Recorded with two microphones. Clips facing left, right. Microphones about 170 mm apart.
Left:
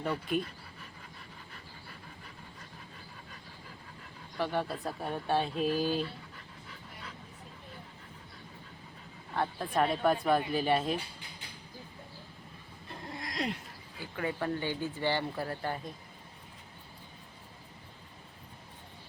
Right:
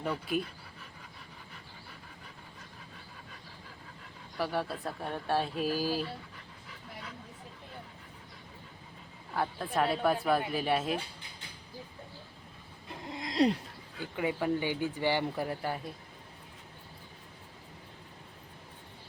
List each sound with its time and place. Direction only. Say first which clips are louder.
0.0 s speech: left 1 dB; 5° right (ahead or behind)
4.4 s speech: even; 5° right (ahead or behind)
9.3 s speech: even; 5° right (ahead or behind)
12.9 s a sound: right 3 dB; 20° right (ahead or behind)
14.2 s speech: right 3 dB; 10° right (ahead or behind)